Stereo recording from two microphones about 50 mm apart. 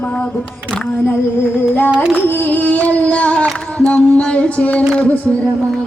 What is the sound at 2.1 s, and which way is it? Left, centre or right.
Singing, left.